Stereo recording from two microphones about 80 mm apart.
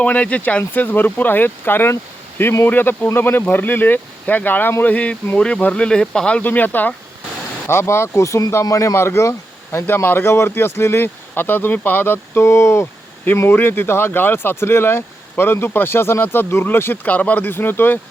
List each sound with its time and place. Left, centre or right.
0.0 s speech: centre
7.7 s speech: left